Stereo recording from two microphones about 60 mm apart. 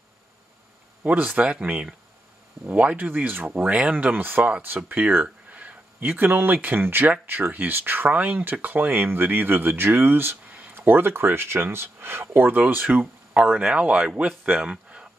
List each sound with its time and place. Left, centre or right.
1.0 s speech: right
3.1 s speech: right; by 15.0 s centre